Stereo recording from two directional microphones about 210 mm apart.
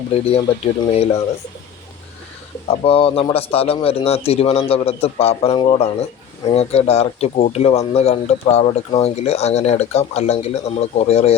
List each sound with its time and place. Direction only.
0.3 s speech: 30° left (ahead or behind)
2.6 s speech: 25° left (ahead or behind)